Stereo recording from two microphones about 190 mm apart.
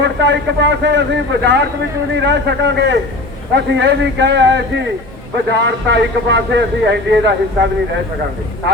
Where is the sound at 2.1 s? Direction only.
70° right (ahead or behind).